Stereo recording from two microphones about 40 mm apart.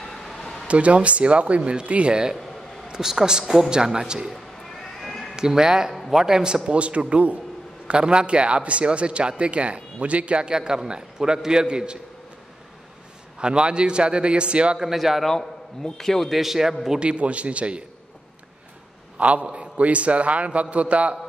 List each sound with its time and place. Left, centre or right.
0.0 s a sound: centre
0.7 s a man's voice: right
2.9 s a man's voice: centre
5.0 s cat: centre
5.3 s a man's voice: centre
13.4 s a man's voice: right
14.8 s a man's voice: centre
16.0 s speech: centre
16.3 s a man's voice: centre
17.0 s a man's voice: right
19.1 s a man's voice: right